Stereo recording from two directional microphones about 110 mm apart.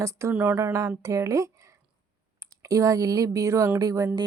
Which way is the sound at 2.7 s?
30° right (ahead or behind).